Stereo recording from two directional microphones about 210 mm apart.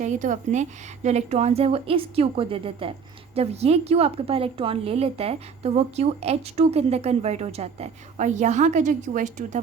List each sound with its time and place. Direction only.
0.0 s a woman's voice: 35° right (ahead or behind)